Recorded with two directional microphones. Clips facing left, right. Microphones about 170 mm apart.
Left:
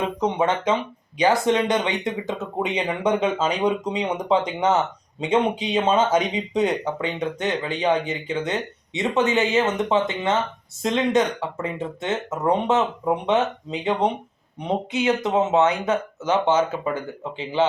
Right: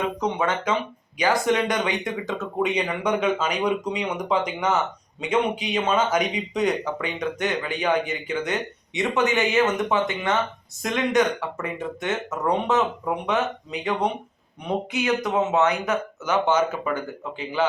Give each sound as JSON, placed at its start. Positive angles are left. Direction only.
{"t": 0.2, "sound": "speech", "side_deg": 25}